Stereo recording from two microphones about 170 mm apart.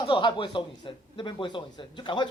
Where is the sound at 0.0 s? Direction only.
30° left (ahead or behind).